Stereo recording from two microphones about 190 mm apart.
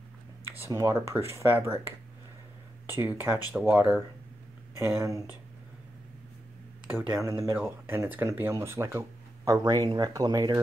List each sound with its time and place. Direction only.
0.7 s speech: 15° right (ahead or behind)
2.9 s speech: 10° right (ahead or behind)
6.9 s speech: 10° right (ahead or behind)